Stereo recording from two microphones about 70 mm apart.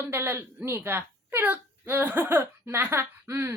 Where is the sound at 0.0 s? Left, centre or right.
Right.